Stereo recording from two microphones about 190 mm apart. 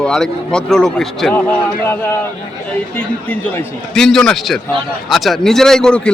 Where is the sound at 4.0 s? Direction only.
Centre (ahead or behind).